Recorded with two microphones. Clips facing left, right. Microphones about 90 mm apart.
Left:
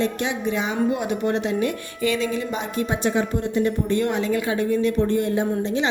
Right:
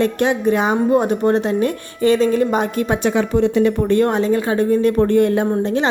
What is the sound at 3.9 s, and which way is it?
A woman's voice, 40° right (ahead or behind).